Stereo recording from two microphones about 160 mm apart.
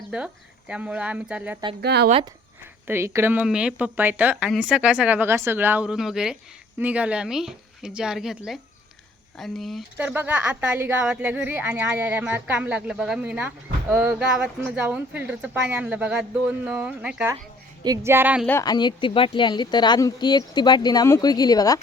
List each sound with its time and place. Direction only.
0.1 s a woman's voice: 5° right (ahead or behind)
1.8 s speech: 90° right
2.8 s a woman's voice: 15° right (ahead or behind); by 9.8 s centre (ahead or behind)
10.0 s a woman's voice: 10° right (ahead or behind)
17.8 s a woman's voice: 20° right (ahead or behind)
18.6 s speech: 25° left (ahead or behind)